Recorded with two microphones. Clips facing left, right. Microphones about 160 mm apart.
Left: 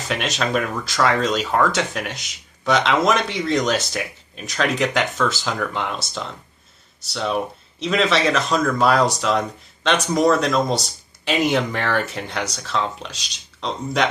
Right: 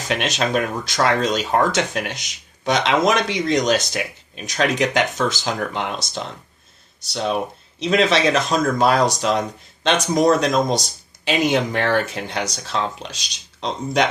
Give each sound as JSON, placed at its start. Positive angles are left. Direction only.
{"t": 0.1, "sound": "speech", "side_deg": -20}